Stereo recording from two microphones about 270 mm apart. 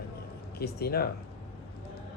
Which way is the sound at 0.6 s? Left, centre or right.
Left.